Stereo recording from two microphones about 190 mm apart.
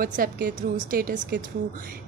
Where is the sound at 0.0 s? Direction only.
50° right (ahead or behind).